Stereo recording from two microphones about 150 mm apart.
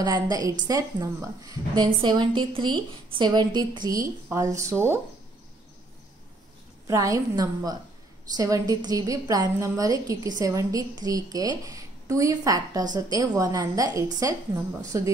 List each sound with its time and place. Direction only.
0.0 s a woman's voice: 25° right (ahead or behind)
6.9 s a woman's voice: 20° right (ahead or behind)